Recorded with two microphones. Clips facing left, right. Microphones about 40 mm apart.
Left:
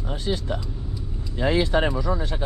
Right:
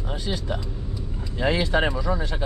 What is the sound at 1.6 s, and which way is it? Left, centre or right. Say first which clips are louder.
Speech: left 2 dB; right.